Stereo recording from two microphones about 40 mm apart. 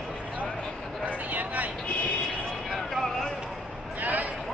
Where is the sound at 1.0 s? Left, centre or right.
Right.